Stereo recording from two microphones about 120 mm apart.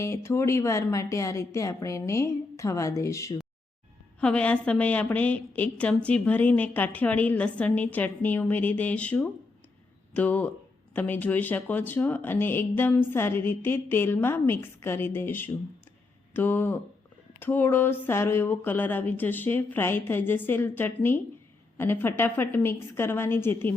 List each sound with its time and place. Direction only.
0.0 s speech: 25° left (ahead or behind)
4.2 s a woman's voice: 10° left (ahead or behind)